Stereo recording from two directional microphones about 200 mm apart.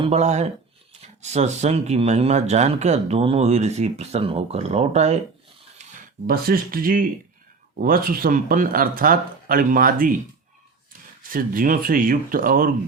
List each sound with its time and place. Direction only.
0.0 s speech: 35° right (ahead or behind)
6.2 s speech: 50° right (ahead or behind)
11.2 s speech: 45° right (ahead or behind)